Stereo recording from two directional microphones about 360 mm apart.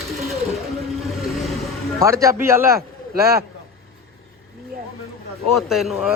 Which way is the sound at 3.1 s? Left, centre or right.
Right.